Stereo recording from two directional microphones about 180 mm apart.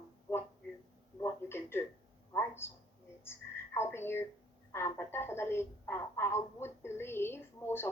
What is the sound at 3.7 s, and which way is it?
A woman's voice, 15° left (ahead or behind).